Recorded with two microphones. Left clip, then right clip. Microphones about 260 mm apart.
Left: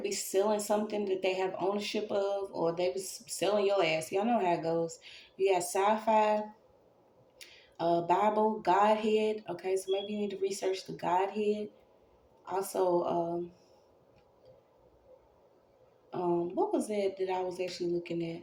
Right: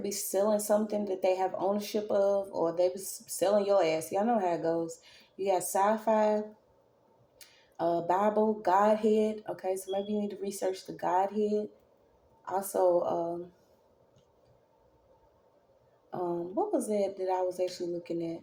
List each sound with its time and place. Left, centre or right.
0.0 s speech: right
7.8 s speech: right
16.6 s speech: right